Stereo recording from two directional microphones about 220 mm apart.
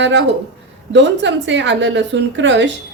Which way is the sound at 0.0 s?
55° right (ahead or behind).